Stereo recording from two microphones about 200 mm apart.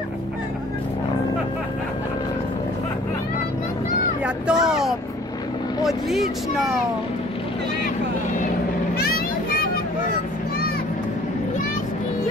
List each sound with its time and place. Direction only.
4.2 s speech: 5° right (ahead or behind)
8.9 s vehicle: 50° left (ahead or behind)